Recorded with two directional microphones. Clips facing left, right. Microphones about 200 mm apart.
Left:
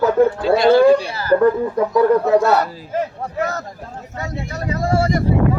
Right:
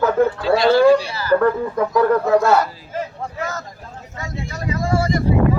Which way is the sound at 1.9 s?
30° left (ahead or behind).